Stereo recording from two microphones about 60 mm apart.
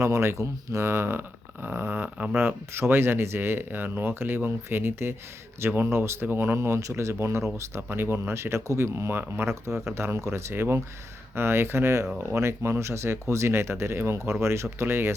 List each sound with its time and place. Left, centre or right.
0.0 s speech: right
1.6 s a sound: right
2.3 s speech: right
7.9 s speech: right